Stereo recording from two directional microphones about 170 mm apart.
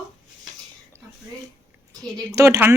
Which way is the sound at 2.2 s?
15° right (ahead or behind).